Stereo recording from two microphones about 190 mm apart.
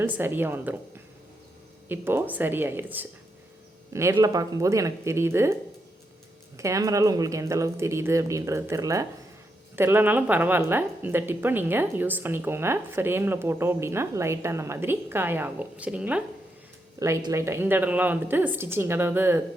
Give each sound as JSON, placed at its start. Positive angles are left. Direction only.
{"t": 0.0, "sound": "speech", "side_deg": -10}
{"t": 1.9, "sound": "speech", "side_deg": -10}
{"t": 6.6, "sound": "speech", "side_deg": -15}